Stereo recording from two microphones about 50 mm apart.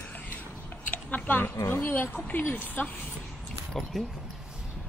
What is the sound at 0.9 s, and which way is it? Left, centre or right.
A woman's voice, left.